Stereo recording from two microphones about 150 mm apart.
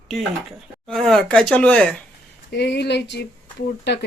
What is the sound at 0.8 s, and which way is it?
Speech, 5° left (ahead or behind).